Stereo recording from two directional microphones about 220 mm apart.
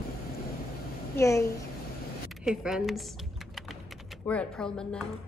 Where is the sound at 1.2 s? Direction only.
15° left (ahead or behind).